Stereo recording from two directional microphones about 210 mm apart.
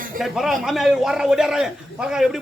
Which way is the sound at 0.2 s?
Centre (ahead or behind).